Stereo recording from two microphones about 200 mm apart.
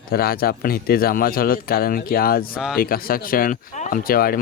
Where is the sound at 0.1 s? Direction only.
50° left (ahead or behind).